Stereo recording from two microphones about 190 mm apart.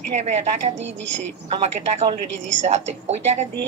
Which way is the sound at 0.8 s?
75° right (ahead or behind).